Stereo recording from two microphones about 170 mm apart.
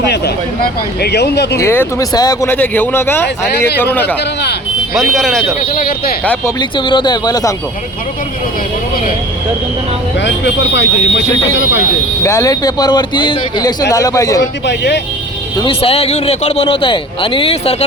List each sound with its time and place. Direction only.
0.6 s speech: 75° left (ahead or behind)
1.5 s speech: 15° left (ahead or behind)
5.1 s speech: centre (ahead or behind)
6.6 s speech: 25° left (ahead or behind)
10.2 s speech: 90° left
12.2 s speech: 15° left (ahead or behind)
14.7 s speech: 90° left
15.6 s a man's voice: 35° left (ahead or behind)